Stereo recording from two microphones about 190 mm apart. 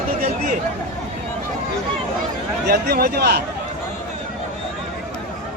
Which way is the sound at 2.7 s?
55° right (ahead or behind).